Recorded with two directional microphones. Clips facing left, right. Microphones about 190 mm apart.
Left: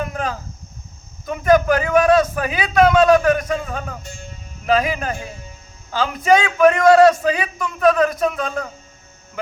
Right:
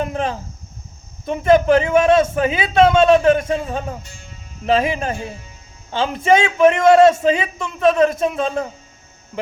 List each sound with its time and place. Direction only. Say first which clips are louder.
0.0 s a sound: right 3 dB; 25° right (ahead or behind)
1.2 s a man's voice: right 1 dB; 25° right (ahead or behind)
4.0 s speech: left 6 dB; 45° left (ahead or behind)
4.6 s a man's voice: right 1 dB; 25° right (ahead or behind)